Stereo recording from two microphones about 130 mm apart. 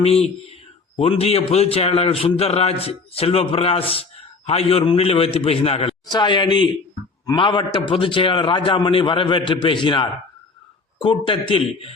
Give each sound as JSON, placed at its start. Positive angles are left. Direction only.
{"t": 0.0, "sound": "a man's voice", "side_deg": 50}
{"t": 6.1, "sound": "a man's voice", "side_deg": 35}